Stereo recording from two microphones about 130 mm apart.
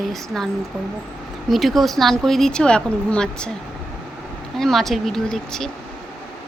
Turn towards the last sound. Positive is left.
turn(degrees=5)  # may be behind; listen again after turning